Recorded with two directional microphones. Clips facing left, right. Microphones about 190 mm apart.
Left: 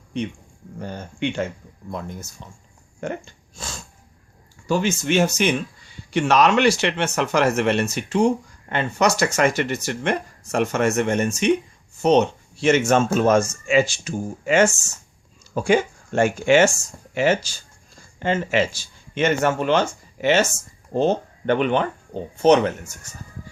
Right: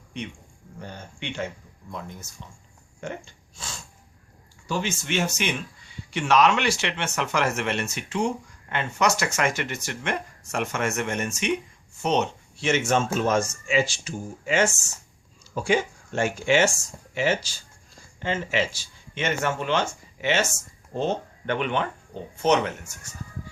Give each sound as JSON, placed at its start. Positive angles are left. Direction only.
{"t": 0.8, "sound": "speech", "side_deg": 45}